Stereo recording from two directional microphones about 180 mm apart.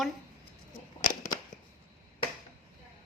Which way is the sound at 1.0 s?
45° left (ahead or behind).